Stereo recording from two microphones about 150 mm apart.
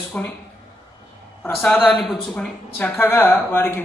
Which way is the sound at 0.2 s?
10° left (ahead or behind).